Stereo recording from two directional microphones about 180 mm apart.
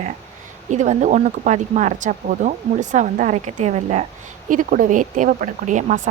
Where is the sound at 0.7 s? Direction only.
40° right (ahead or behind).